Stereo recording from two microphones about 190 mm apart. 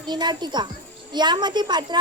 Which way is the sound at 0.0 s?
25° right (ahead or behind).